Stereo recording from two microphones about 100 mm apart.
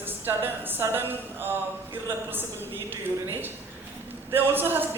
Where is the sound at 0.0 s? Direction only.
20° right (ahead or behind).